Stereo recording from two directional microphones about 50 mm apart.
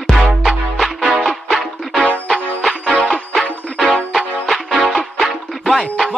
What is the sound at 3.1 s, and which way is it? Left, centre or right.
Music, centre.